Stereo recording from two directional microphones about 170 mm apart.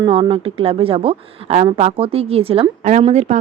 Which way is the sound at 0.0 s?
30° right (ahead or behind).